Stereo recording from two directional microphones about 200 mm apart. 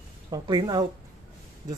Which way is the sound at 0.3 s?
20° right (ahead or behind).